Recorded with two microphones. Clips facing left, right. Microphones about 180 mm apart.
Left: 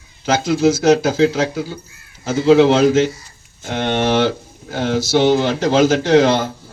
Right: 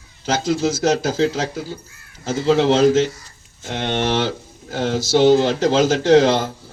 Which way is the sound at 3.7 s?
50° left (ahead or behind).